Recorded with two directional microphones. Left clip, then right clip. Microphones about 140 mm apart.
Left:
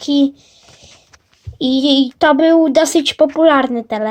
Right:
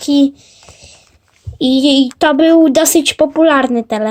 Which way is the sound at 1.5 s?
Centre (ahead or behind).